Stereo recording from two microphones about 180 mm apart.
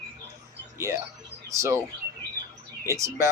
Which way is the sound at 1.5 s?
15° right (ahead or behind).